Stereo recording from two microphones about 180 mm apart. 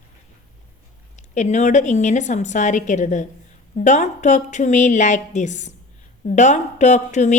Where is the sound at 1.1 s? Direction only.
40° left (ahead or behind).